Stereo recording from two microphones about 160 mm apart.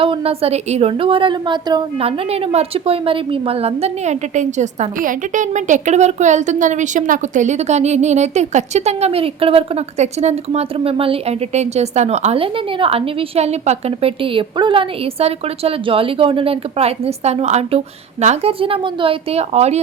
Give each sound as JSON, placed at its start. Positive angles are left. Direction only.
{"t": 0.0, "sound": "a woman's voice", "side_deg": -35}